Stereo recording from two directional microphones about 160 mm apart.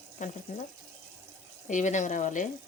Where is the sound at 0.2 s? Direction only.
50° left (ahead or behind).